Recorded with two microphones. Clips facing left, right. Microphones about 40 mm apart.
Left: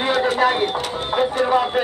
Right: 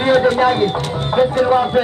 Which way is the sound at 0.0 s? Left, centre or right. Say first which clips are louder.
Right 5 dB; centre.